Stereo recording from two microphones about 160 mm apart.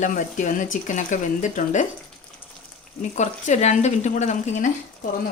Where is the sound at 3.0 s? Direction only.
45° left (ahead or behind).